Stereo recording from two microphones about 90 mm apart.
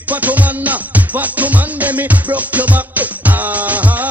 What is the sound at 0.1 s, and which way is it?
Music, 15° right (ahead or behind).